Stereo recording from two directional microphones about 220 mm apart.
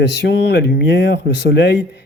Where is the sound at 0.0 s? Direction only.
50° left (ahead or behind).